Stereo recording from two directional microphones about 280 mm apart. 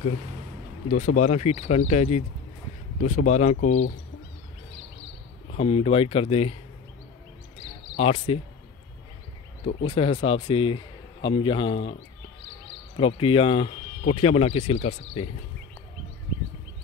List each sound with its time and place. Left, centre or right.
0.8 s speech: left
5.6 s speech: centre
7.9 s speech: left
9.8 s speech: centre